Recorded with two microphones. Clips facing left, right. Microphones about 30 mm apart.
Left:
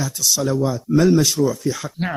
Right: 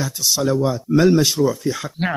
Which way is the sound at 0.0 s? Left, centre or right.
Centre.